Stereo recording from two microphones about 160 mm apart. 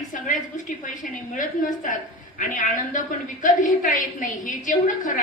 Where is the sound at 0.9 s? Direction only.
55° left (ahead or behind).